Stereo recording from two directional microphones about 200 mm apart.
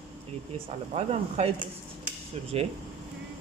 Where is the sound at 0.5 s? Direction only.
30° right (ahead or behind).